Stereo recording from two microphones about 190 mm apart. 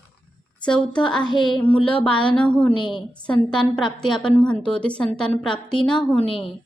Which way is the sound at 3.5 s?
25° left (ahead or behind).